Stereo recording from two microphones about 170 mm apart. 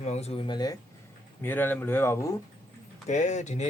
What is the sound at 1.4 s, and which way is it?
Speech, 10° left (ahead or behind).